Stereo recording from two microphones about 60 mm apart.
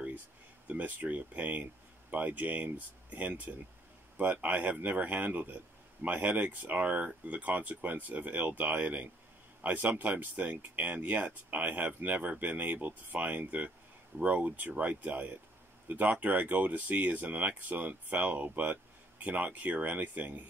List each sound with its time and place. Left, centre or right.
0.7 s speech: right